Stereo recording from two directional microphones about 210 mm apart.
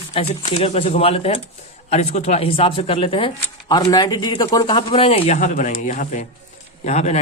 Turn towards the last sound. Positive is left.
turn(degrees=30)  # may be behind; listen again after turning